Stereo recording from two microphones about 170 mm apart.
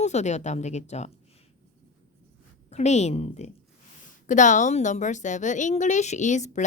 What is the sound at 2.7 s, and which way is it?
A woman's voice, 40° left (ahead or behind).